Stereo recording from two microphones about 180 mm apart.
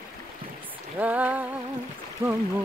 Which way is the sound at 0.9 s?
10° right (ahead or behind).